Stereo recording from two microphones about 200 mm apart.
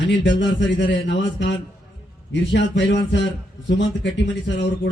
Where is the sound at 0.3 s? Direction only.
65° left (ahead or behind).